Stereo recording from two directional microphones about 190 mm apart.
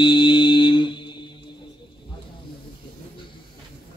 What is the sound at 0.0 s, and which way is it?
Music, 25° left (ahead or behind).